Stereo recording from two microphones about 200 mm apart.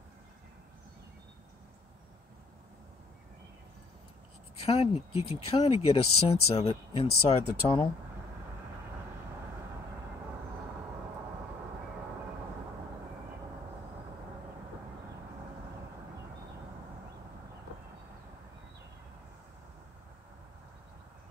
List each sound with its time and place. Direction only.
4.6 s speech: 30° left (ahead or behind)